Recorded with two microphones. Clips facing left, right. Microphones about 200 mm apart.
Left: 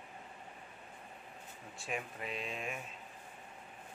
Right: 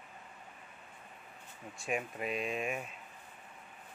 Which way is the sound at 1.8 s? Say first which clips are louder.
Right 5 dB; 10° right (ahead or behind).